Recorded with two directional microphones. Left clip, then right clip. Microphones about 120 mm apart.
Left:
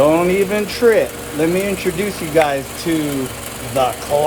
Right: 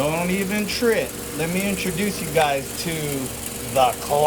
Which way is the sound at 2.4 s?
20° right (ahead or behind).